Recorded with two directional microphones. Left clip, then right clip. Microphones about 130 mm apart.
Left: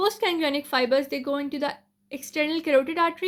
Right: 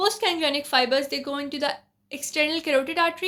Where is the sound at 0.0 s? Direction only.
45° left (ahead or behind).